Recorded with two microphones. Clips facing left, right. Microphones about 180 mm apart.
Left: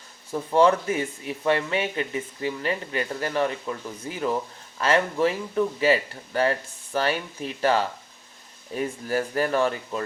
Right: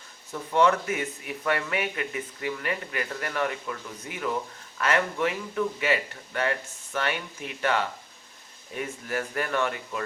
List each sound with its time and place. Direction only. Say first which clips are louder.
0.3 s speech: left 3 dB; 30° left (ahead or behind)